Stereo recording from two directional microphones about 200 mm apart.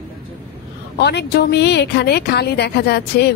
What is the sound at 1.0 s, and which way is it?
A woman's voice, 55° left (ahead or behind).